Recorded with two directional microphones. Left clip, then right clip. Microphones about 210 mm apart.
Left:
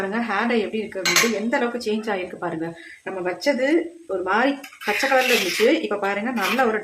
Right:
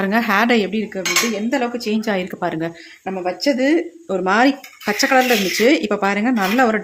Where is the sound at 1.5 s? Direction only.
30° right (ahead or behind).